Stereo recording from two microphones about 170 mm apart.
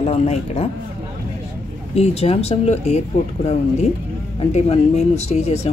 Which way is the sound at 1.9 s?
40° left (ahead or behind).